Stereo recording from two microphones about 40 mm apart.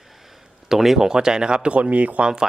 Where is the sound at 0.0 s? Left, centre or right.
Centre.